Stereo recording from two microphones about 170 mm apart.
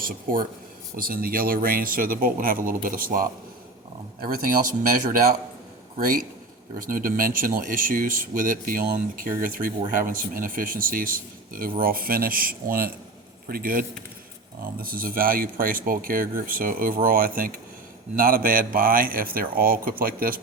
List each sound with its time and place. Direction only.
0.0 s speech: 55° right (ahead or behind)